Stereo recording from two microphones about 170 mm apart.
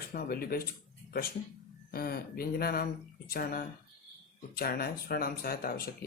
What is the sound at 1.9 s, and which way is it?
Speech, 60° left (ahead or behind).